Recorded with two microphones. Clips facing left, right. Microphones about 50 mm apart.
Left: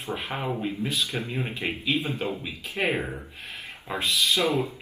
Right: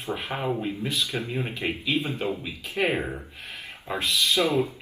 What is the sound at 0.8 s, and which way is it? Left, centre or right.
Music, centre.